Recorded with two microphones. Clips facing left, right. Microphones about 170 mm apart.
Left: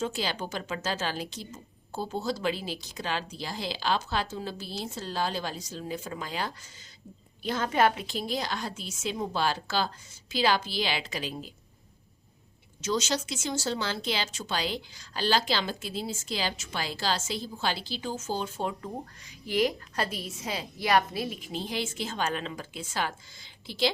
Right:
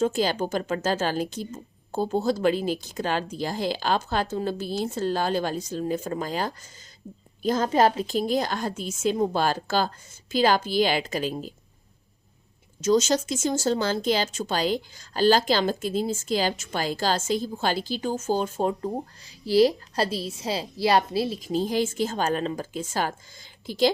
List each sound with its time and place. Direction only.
0.0 s speech: 45° right (ahead or behind)
12.8 s speech: 45° right (ahead or behind)